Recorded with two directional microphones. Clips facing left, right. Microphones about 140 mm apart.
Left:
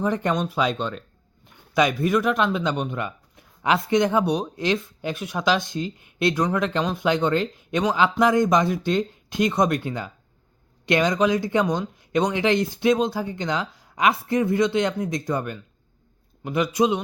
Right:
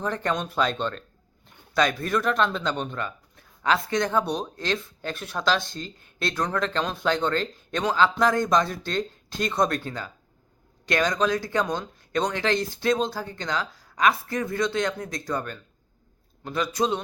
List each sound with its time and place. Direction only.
0.0 s speech: 15° left (ahead or behind)